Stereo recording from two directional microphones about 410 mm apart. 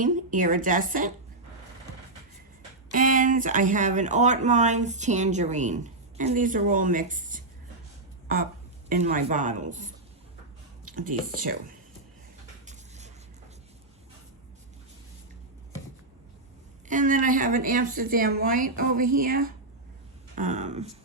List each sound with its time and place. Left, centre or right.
0.0 s speech: centre
2.9 s speech: centre
8.9 s speech: centre
16.9 s speech: centre